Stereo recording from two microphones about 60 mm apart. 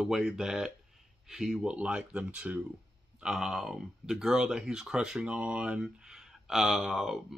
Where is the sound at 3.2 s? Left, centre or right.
Centre.